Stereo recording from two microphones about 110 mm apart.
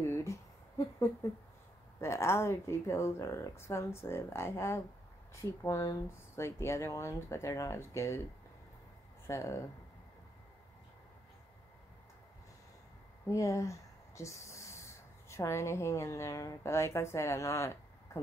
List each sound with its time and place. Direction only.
0.1 s a sound: 25° left (ahead or behind)
2.0 s speech: 25° left (ahead or behind)
9.3 s speech: 25° left (ahead or behind)
13.3 s speech: 30° left (ahead or behind)